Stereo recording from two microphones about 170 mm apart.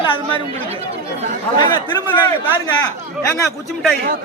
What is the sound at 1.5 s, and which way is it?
Speech, 25° left (ahead or behind).